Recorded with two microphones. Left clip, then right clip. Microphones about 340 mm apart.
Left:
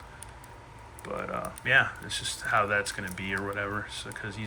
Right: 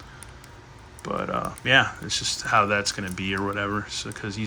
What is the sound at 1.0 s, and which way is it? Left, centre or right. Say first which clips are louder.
Speech: right 6 dB; centre.